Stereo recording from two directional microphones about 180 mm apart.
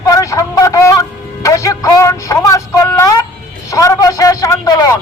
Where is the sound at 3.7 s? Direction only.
15° left (ahead or behind).